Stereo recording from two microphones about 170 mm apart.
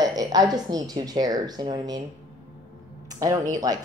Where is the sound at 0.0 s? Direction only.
20° right (ahead or behind).